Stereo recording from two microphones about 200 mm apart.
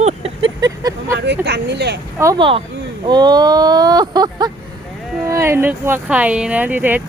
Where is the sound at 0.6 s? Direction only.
20° right (ahead or behind).